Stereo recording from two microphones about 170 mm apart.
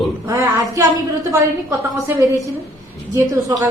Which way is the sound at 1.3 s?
15° right (ahead or behind).